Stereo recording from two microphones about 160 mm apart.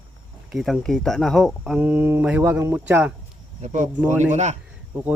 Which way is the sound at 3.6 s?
50° right (ahead or behind).